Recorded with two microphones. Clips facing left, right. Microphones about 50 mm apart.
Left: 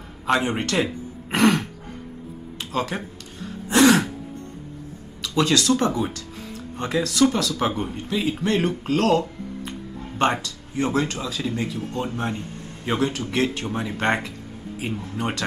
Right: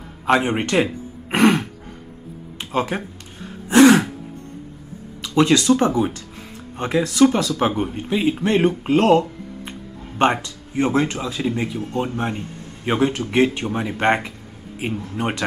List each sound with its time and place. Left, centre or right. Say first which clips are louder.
0.2 s speech: right 4 dB; centre
1.3 s throat clearing: right 3 dB; right
2.6 s speech: right 4 dB; right
3.6 s throat clearing: right 5 dB; right
5.2 s speech: right 4 dB; right